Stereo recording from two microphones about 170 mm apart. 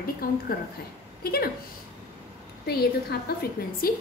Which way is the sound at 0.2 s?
60° left (ahead or behind).